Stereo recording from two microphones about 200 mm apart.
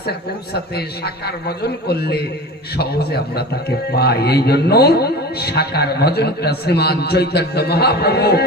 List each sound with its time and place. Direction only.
0.0 s a man's voice: 50° left (ahead or behind)